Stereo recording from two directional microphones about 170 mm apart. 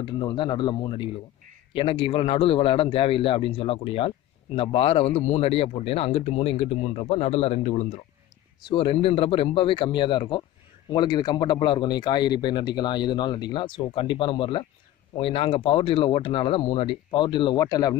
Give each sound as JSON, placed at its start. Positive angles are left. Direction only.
{"t": 0.0, "sound": "a man's voice", "side_deg": 25}